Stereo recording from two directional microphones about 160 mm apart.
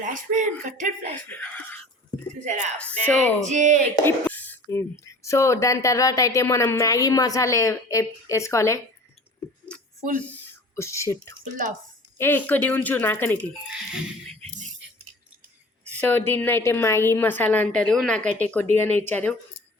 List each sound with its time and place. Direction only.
0.0 s speech: 55° right (ahead or behind)
1.3 s a woman's voice: 10° left (ahead or behind)
2.4 s speech: 50° right (ahead or behind)
2.7 s a woman's voice: 10° left (ahead or behind)
3.2 s speech: 50° right (ahead or behind)
4.0 s speech: 10° left (ahead or behind)
10.3 s a woman's voice: 15° left (ahead or behind)
13.9 s speech: centre (ahead or behind)
15.8 s a woman's voice: 10° left (ahead or behind)
18.2 s speech: 50° right (ahead or behind)
18.5 s a woman's voice: 15° left (ahead or behind)